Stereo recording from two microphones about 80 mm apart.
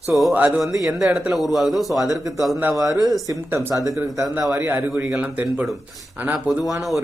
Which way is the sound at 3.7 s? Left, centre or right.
Right.